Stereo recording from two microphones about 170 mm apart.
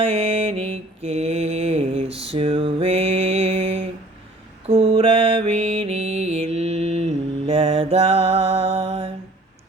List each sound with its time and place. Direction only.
0.0 s music: 40° right (ahead or behind)
0.7 s mantra: 40° right (ahead or behind)